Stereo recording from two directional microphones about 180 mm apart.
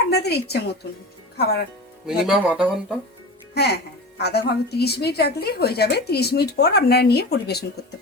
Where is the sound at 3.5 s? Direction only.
65° left (ahead or behind).